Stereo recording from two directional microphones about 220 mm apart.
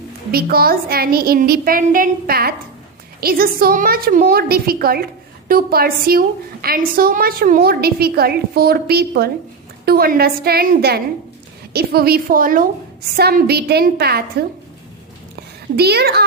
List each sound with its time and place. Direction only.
0.3 s a woman's voice: 45° right (ahead or behind)
15.7 s a woman's voice: 45° right (ahead or behind)